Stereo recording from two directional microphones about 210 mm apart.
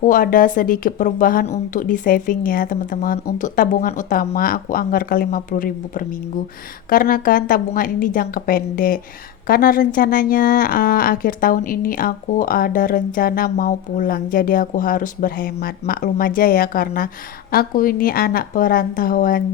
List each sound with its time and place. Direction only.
0.0 s a woman's voice: 40° left (ahead or behind)